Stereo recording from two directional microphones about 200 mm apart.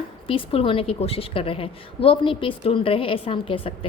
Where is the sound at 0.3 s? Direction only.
30° left (ahead or behind).